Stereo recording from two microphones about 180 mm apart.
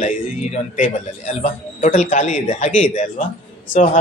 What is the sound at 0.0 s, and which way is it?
A man's voice, 45° left (ahead or behind).